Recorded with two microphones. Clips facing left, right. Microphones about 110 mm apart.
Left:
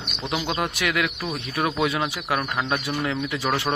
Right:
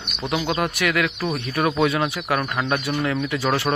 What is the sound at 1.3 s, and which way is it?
Speech, centre (ahead or behind).